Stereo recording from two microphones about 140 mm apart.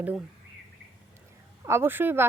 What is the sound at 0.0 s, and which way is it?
Speech, 10° right (ahead or behind).